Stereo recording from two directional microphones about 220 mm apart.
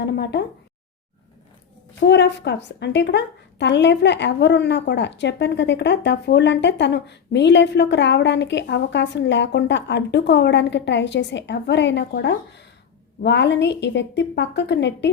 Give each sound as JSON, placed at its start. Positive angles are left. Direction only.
{"t": 0.0, "sound": "a woman's voice", "side_deg": 50}
{"t": 2.0, "sound": "a woman's voice", "side_deg": 55}